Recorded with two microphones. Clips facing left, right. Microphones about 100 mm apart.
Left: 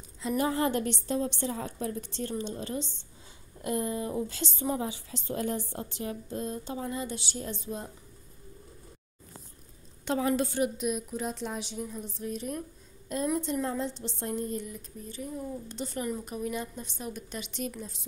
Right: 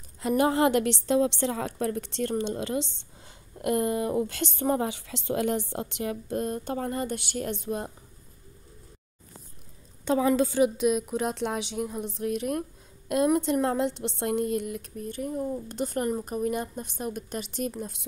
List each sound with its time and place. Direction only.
0.2 s a woman's voice: 65° right (ahead or behind); by 2.9 s 85° right
3.6 s speech: 70° right (ahead or behind)
10.6 s speech: 90° right; by 17.9 s 45° right (ahead or behind)